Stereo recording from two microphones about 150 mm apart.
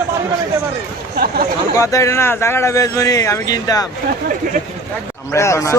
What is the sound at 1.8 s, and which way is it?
Speech, 20° left (ahead or behind).